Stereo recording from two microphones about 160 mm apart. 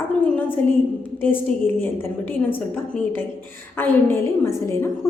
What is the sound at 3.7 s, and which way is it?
A woman's voice, 15° left (ahead or behind).